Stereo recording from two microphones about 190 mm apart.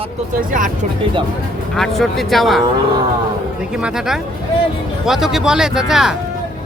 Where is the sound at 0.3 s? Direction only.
45° right (ahead or behind).